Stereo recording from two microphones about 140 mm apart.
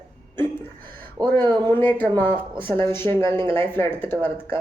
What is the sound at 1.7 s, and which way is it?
Speech, 15° left (ahead or behind).